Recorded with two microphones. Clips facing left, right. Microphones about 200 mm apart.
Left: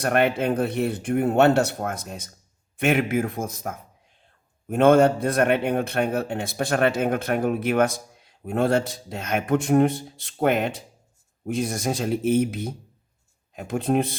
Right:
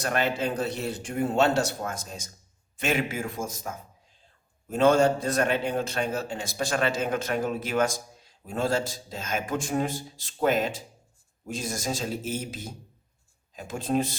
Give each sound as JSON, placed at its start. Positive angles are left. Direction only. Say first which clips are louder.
{"t": 0.0, "sound": "speech", "louder": "left 6 dB", "side_deg": 55}